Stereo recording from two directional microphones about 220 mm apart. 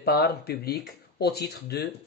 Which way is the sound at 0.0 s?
45° left (ahead or behind).